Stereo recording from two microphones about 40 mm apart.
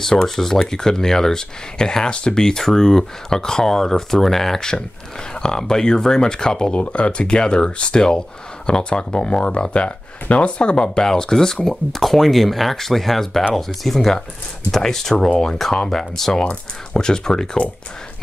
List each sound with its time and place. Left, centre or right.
0.0 s speech: centre
4.6 s speech: centre